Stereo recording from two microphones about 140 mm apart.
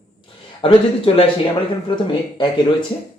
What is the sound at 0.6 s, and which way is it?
Speech, 40° left (ahead or behind).